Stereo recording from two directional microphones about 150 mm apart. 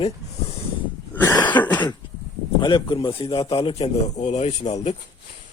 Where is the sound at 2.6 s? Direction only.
30° left (ahead or behind).